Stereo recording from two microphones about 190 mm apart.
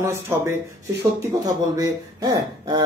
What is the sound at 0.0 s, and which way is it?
Speech, 15° right (ahead or behind).